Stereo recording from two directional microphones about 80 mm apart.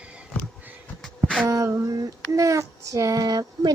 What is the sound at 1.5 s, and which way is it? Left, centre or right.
Female singing, right.